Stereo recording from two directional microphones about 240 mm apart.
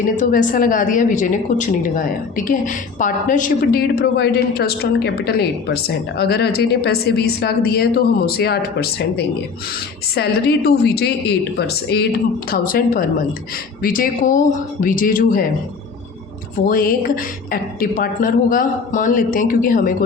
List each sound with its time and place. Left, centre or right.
0.2 s a woman's voice: left
16.6 s a woman's voice: left